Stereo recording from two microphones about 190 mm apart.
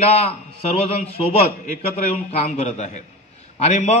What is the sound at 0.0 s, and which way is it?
Speech, 30° left (ahead or behind).